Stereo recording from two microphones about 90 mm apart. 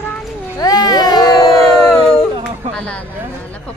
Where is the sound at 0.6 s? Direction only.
45° left (ahead or behind).